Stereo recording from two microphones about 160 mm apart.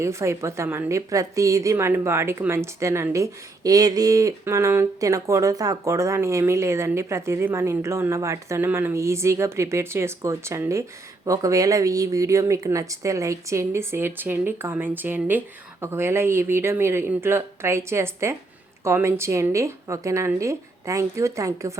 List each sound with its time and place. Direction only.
0.0 s speech: 15° right (ahead or behind)